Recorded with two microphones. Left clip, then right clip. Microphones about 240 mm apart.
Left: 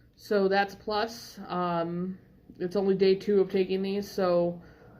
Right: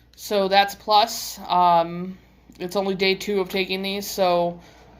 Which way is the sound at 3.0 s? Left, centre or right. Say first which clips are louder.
Even; right.